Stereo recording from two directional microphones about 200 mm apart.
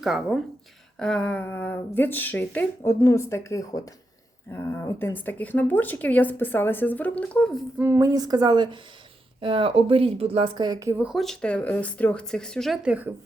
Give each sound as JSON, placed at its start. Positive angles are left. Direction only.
{"t": 0.0, "sound": "a woman's voice", "side_deg": 0}
{"t": 7.8, "sound": "speech", "side_deg": -15}